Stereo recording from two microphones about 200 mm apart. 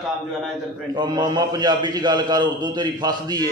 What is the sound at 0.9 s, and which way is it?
A man's voice, 20° right (ahead or behind).